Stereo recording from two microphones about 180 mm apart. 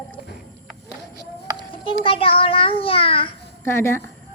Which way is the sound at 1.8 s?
30° left (ahead or behind).